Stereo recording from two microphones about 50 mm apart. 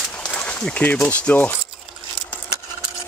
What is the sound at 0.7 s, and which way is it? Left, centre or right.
Speech, left.